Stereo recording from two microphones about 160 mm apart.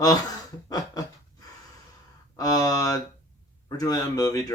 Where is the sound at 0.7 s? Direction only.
25° left (ahead or behind).